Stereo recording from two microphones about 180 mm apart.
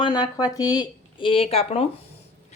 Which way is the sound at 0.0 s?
25° left (ahead or behind).